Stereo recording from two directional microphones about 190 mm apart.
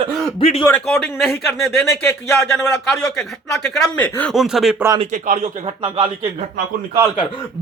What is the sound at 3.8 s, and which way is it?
Speech, 10° left (ahead or behind).